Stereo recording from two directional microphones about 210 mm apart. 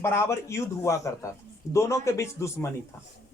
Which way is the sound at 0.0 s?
10° left (ahead or behind).